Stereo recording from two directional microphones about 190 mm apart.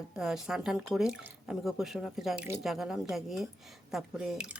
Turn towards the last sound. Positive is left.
turn(degrees=-5)  # may be behind; listen again after turning